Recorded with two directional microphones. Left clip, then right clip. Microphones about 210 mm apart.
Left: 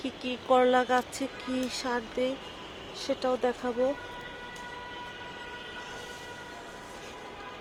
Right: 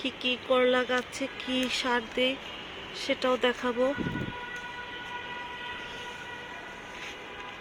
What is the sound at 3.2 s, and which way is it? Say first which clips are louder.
Speech: right 2 dB; 20° right (ahead or behind).